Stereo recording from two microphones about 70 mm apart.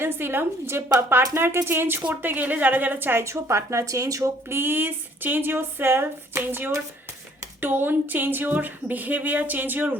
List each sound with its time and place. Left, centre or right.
0.0 s a woman's voice: right
2.0 s speech: right
3.2 s speech: right
4.4 s a woman's voice: right